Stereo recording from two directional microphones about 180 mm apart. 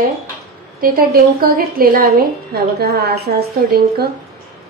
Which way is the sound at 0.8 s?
55° right (ahead or behind).